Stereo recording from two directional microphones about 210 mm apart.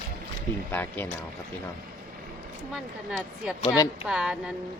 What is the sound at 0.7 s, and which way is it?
Speech, 10° left (ahead or behind).